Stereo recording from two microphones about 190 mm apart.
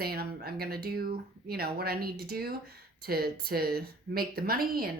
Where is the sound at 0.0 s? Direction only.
55° right (ahead or behind).